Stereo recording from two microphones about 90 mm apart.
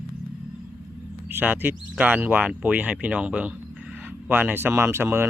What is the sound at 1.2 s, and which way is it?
Speech, 20° right (ahead or behind).